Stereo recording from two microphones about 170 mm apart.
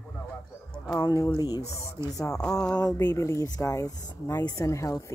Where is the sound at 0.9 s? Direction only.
20° left (ahead or behind).